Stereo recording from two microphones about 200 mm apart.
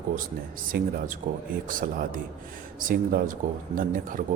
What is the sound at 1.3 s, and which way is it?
Speech, 40° right (ahead or behind).